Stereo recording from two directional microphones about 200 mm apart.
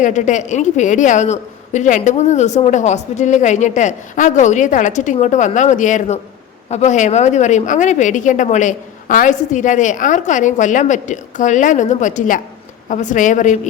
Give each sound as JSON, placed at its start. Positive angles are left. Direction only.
{"t": 0.0, "sound": "a woman's voice", "side_deg": 35}